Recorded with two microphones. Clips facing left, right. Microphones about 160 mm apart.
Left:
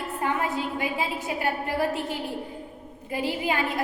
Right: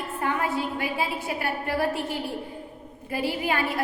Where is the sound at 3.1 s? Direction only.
20° left (ahead or behind).